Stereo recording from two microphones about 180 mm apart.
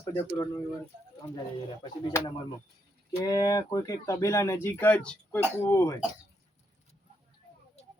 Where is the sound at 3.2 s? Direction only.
20° left (ahead or behind).